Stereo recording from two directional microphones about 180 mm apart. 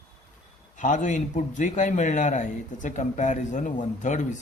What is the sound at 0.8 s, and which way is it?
Speech, 45° left (ahead or behind).